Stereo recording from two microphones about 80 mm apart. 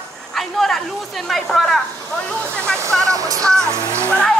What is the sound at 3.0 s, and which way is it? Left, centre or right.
Speech, right.